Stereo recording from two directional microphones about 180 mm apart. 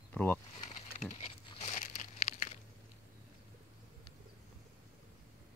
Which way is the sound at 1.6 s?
45° left (ahead or behind).